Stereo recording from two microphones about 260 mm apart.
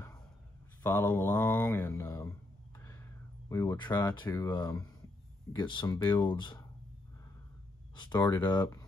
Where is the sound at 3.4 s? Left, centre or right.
Centre.